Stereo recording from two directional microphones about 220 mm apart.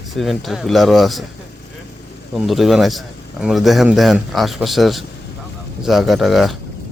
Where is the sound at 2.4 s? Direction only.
Centre (ahead or behind).